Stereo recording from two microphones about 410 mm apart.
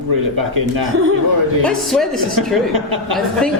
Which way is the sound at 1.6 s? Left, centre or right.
Centre.